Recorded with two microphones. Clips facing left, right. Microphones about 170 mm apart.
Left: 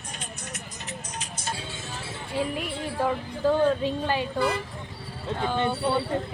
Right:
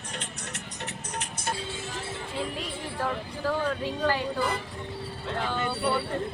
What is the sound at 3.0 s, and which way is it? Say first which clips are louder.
Speech: left 5 dB; 20° left (ahead or behind).